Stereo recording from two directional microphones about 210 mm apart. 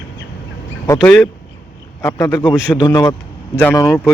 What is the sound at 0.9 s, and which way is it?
Speech, 5° left (ahead or behind).